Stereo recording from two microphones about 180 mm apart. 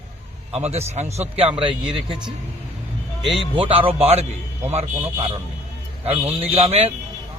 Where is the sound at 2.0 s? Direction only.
5° right (ahead or behind).